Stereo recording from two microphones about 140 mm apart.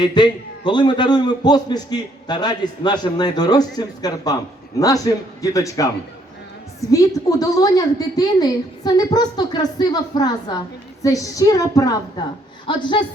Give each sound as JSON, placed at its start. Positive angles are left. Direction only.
{"t": 0.0, "sound": "a man's voice", "side_deg": 30}